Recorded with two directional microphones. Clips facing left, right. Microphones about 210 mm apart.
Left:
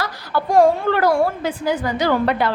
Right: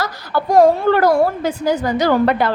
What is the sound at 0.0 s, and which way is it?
A woman's voice, 40° right (ahead or behind).